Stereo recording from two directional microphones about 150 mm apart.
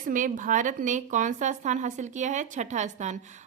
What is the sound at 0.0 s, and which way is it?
A woman's voice, 60° right (ahead or behind).